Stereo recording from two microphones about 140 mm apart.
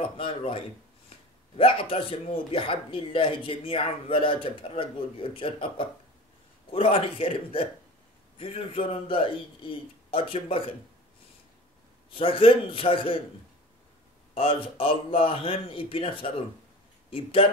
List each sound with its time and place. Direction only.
0.0 s speech: 40° left (ahead or behind)
12.1 s speech: 40° left (ahead or behind)
14.3 s speech: 40° left (ahead or behind)